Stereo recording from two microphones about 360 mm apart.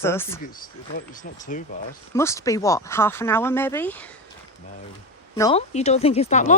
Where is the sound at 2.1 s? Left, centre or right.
Centre.